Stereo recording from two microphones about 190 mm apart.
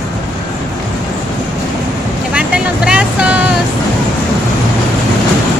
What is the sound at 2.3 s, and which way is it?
Vehicle, 5° right (ahead or behind).